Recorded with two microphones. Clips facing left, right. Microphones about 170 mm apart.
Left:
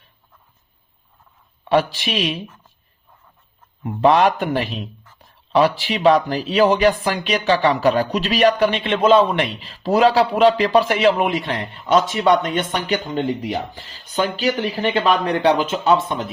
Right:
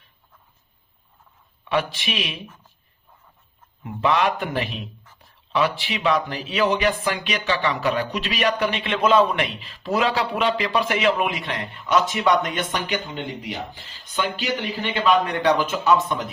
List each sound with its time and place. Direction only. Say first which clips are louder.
1.6 s speech: left 6 dB; 35° left (ahead or behind)
3.8 s speech: left 6 dB; 35° left (ahead or behind)